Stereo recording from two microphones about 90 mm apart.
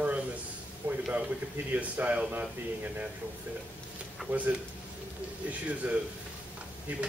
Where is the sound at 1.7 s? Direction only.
15° right (ahead or behind).